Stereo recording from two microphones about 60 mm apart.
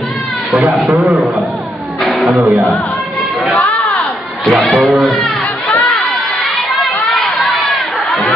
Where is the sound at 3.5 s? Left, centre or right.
Left.